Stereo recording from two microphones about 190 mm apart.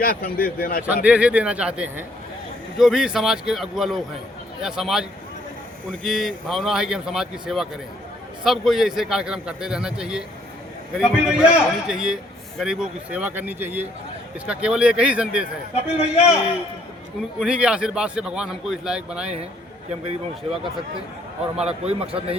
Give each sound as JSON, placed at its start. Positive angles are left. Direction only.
{"t": 0.0, "sound": "speech", "side_deg": 50}
{"t": 1.0, "sound": "a man's voice", "side_deg": -5}
{"t": 15.7, "sound": "a man's voice", "side_deg": 35}
{"t": 17.2, "sound": "a man's voice", "side_deg": -5}
{"t": 19.9, "sound": "a man's voice", "side_deg": -30}